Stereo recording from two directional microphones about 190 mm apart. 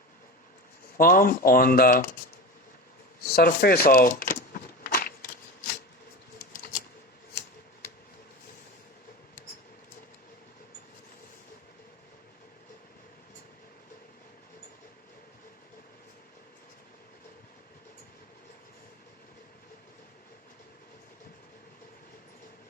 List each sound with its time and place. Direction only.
0.9 s speech: 50° left (ahead or behind)
3.3 s speech: 55° left (ahead or behind)
4.8 s a sound: 50° left (ahead or behind)
6.5 s typewriter: 50° left (ahead or behind)